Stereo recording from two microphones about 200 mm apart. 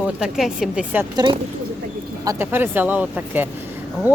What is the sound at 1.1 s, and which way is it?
Speech, 25° right (ahead or behind).